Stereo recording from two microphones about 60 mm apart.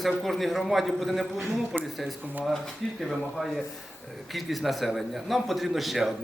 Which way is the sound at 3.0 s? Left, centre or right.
Centre.